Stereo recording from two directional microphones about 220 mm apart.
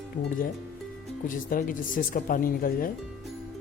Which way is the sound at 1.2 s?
35° left (ahead or behind).